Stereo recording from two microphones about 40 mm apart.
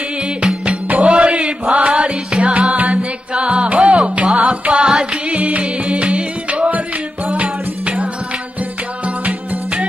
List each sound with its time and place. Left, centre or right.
0.4 s music: right
5.3 s music: right
9.0 s music: right